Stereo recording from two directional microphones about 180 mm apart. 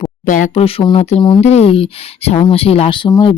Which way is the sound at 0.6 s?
30° left (ahead or behind).